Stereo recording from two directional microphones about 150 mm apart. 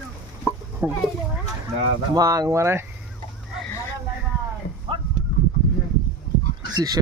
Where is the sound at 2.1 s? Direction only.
25° right (ahead or behind).